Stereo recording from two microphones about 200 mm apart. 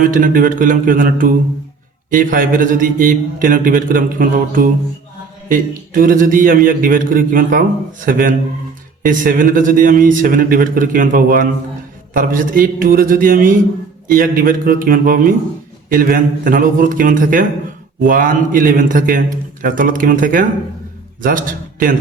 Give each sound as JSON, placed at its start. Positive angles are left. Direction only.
{"t": 0.1, "sound": "a man's voice", "side_deg": -45}